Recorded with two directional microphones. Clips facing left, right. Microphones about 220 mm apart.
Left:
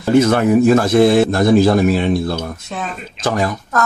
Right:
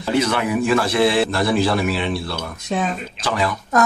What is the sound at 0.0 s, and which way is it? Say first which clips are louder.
A man's voice: left 7 dB; 45° left (ahead or behind).